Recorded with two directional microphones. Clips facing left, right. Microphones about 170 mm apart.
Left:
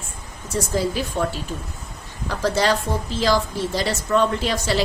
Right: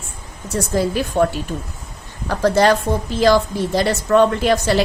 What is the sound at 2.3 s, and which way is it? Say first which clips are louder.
A woman's voice: right 6 dB; 55° right (ahead or behind).